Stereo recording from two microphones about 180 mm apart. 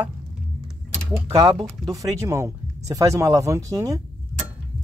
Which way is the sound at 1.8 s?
20° right (ahead or behind).